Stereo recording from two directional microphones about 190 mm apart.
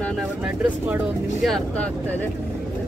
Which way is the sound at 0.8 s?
10° right (ahead or behind).